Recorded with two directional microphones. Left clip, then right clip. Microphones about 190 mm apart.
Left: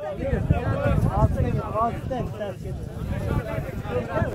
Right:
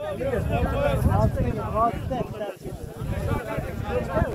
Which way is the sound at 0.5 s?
60° right (ahead or behind).